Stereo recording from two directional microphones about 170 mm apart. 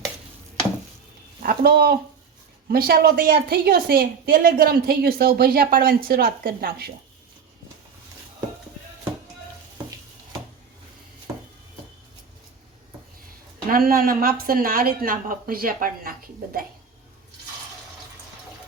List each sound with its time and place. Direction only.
1.4 s a woman's voice: 60° right (ahead or behind)
13.7 s a woman's voice: 60° right (ahead or behind)